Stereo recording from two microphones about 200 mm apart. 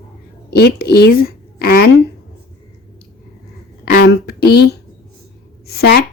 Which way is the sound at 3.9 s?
50° left (ahead or behind).